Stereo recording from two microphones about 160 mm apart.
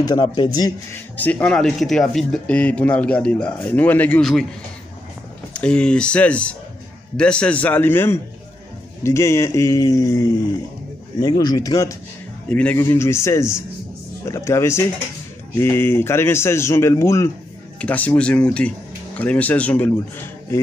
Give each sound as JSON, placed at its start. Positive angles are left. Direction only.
{"t": 0.1, "sound": "speech", "side_deg": 30}
{"t": 1.1, "sound": "speech", "side_deg": 10}
{"t": 5.6, "sound": "speech", "side_deg": 5}
{"t": 12.4, "sound": "speech", "side_deg": 10}